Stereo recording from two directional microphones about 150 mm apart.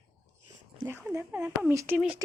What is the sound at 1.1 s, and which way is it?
Speech, 15° right (ahead or behind).